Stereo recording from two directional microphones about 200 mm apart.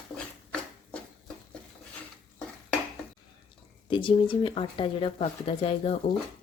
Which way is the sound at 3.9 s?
25° left (ahead or behind).